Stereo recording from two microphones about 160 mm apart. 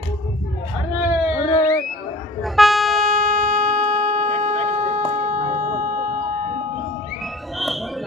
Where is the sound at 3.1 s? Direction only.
55° right (ahead or behind).